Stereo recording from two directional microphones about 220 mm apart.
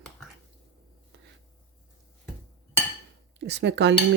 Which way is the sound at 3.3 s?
50° right (ahead or behind).